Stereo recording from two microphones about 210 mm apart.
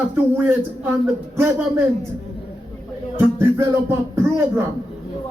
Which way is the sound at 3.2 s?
10° right (ahead or behind).